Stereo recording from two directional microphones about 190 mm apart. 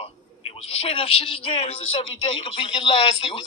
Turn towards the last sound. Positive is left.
turn(degrees=30)  # may be behind; listen again after turning